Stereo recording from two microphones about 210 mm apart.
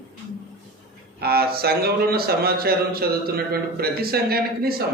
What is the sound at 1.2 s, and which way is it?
Speech, 50° right (ahead or behind).